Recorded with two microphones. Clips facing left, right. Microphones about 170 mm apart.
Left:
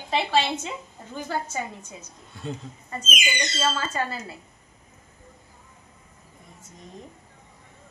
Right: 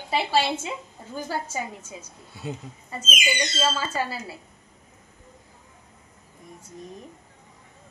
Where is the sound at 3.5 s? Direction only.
10° right (ahead or behind).